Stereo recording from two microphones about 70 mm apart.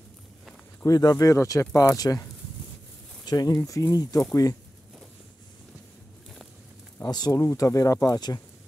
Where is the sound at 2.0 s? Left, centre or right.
Left.